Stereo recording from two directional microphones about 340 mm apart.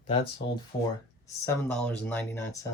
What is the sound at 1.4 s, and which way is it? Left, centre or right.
Speech, centre.